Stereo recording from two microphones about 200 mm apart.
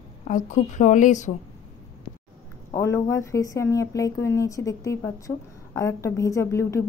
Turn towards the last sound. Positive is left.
turn(degrees=15)  # may be behind; listen again after turning